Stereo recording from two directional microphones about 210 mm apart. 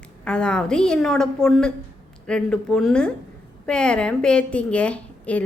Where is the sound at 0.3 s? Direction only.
5° left (ahead or behind).